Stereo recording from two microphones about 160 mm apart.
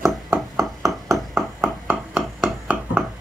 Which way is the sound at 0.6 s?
20° right (ahead or behind).